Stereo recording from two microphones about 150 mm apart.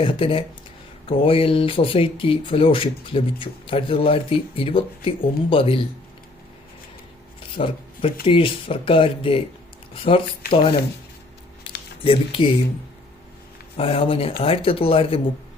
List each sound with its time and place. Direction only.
0.0 s speech: 35° left (ahead or behind)
7.5 s speech: 35° left (ahead or behind)
11.7 s a sound: 35° left (ahead or behind)
12.0 s speech: 35° left (ahead or behind)
13.7 s speech: 40° left (ahead or behind)